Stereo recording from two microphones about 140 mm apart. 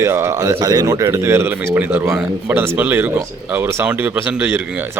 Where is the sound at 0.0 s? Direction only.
20° right (ahead or behind).